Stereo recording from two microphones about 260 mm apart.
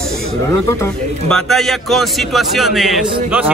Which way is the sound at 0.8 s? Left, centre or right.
Centre.